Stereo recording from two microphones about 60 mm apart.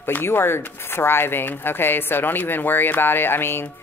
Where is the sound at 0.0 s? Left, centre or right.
Left.